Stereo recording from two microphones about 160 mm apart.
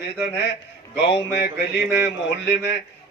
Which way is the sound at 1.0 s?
90° left.